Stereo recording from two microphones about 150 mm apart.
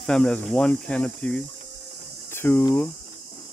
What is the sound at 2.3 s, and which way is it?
Cricket, 15° left (ahead or behind).